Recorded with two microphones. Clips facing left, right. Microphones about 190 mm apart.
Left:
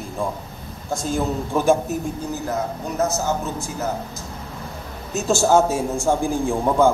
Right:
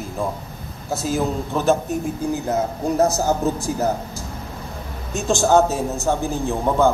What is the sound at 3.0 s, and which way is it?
Speech, 35° right (ahead or behind).